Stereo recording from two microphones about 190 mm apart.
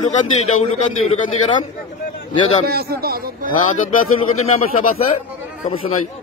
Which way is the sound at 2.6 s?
55° right (ahead or behind).